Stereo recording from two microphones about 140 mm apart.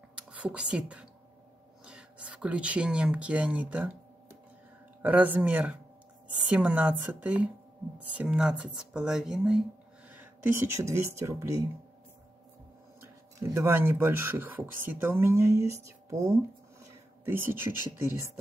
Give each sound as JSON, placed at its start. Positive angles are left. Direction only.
{"t": 0.3, "sound": "speech", "side_deg": -10}
{"t": 5.0, "sound": "speech", "side_deg": -10}
{"t": 13.4, "sound": "speech", "side_deg": -20}